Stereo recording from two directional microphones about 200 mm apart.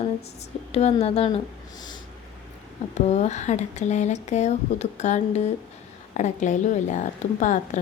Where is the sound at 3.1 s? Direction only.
35° left (ahead or behind).